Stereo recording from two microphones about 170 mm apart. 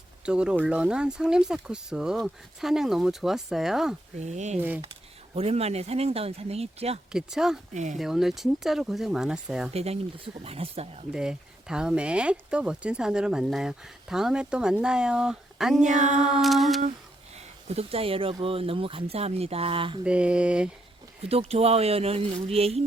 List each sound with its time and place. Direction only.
0.3 s speech: 5° right (ahead or behind)
4.2 s speech: 45° right (ahead or behind)
7.1 s speech: 5° right (ahead or behind)
7.7 s speech: 45° right (ahead or behind)
7.9 s speech: centre (ahead or behind)
9.7 s speech: 35° right (ahead or behind)
11.1 s speech: 5° right (ahead or behind)
16.0 s speech: 45° right (ahead or behind)
16.2 s speech: centre (ahead or behind)
17.7 s speech: 35° right (ahead or behind)
20.1 s mantra: 5° right (ahead or behind)
21.2 s speech: 35° right (ahead or behind)